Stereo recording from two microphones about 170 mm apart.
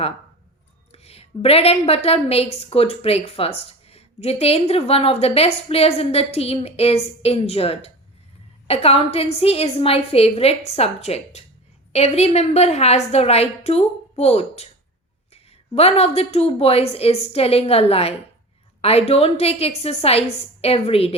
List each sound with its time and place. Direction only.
0.9 s a woman's voice: 35° left (ahead or behind)